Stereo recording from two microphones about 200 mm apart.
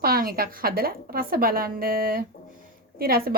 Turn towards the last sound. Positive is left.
turn(degrees=-50)  # may be behind; listen again after turning